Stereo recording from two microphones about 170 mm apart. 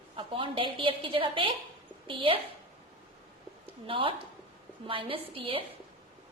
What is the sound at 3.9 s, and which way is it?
A woman's voice, 30° right (ahead or behind).